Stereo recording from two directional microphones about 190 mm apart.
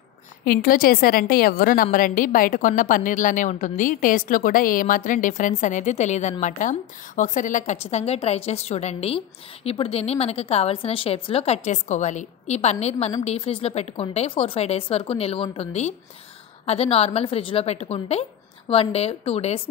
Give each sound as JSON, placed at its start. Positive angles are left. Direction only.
{"t": 0.5, "sound": "a woman's voice", "side_deg": 50}